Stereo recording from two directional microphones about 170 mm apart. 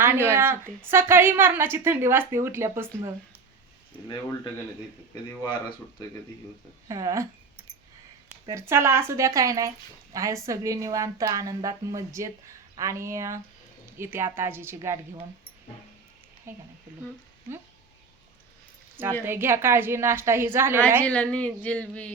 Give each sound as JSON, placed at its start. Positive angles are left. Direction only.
{"t": 0.0, "sound": "a woman's voice", "side_deg": -15}
{"t": 6.8, "sound": "speech", "side_deg": -20}
{"t": 8.4, "sound": "a woman's voice", "side_deg": -15}
{"t": 16.5, "sound": "a woman's voice", "side_deg": -15}
{"t": 19.2, "sound": "a woman's voice", "side_deg": -15}
{"t": 21.0, "sound": "speech", "side_deg": 10}